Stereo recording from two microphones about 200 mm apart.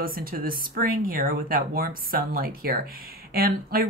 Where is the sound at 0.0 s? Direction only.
45° right (ahead or behind).